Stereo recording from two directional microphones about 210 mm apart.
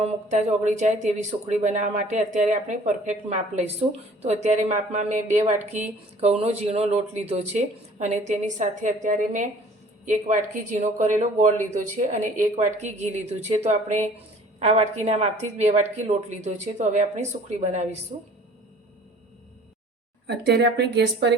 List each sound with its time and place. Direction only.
0.0 s a woman's voice: 35° right (ahead or behind)
15.0 s a woman's voice: 30° right (ahead or behind)
20.2 s a woman's voice: 55° right (ahead or behind)